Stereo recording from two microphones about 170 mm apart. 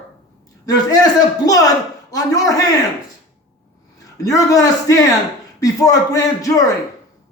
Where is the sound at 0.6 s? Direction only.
20° left (ahead or behind).